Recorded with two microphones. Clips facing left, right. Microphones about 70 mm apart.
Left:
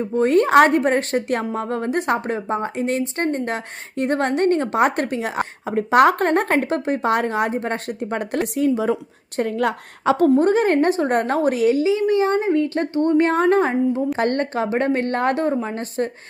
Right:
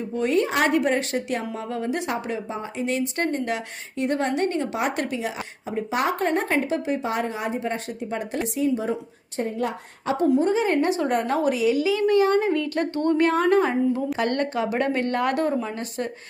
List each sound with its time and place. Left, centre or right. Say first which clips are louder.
0.0 s a woman's voice: left 6 dB; left
8.7 s speech: left 5 dB; left
9.4 s a woman's voice: left 5 dB; left
10.2 s a woman's voice: left 4 dB; left
11.8 s a woman's voice: left 2 dB; left